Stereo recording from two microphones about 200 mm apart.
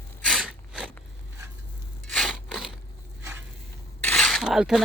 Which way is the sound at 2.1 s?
Centre (ahead or behind).